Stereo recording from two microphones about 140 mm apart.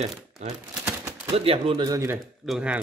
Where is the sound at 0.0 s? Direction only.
50° right (ahead or behind).